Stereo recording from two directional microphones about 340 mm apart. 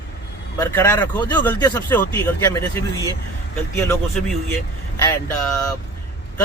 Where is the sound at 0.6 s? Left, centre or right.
Centre.